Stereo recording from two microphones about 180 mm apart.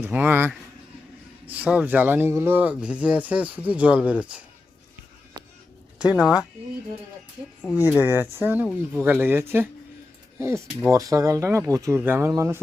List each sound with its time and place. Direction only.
0.0 s speech: 10° right (ahead or behind)
5.4 s a sound: 25° right (ahead or behind)
6.0 s speech: 5° right (ahead or behind)
7.8 s speech: 10° right (ahead or behind)